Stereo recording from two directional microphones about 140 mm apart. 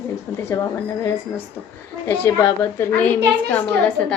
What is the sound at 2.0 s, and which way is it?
A woman's voice, 20° left (ahead or behind).